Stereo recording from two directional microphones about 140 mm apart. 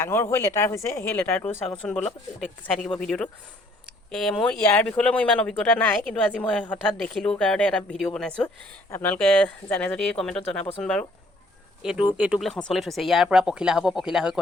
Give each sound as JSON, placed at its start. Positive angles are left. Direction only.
{"t": 0.0, "sound": "speech", "side_deg": 15}
{"t": 11.8, "sound": "speech", "side_deg": -5}